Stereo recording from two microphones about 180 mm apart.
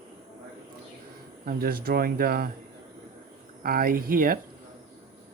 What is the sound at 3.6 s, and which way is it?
Speech, 55° right (ahead or behind).